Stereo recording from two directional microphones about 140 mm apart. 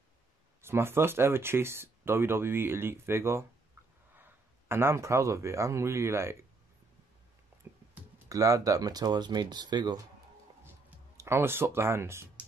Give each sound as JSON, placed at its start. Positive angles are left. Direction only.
{"t": 0.6, "sound": "speech", "side_deg": -15}
{"t": 7.6, "sound": "music", "side_deg": -15}
{"t": 8.3, "sound": "speech", "side_deg": -25}
{"t": 11.1, "sound": "speech", "side_deg": -20}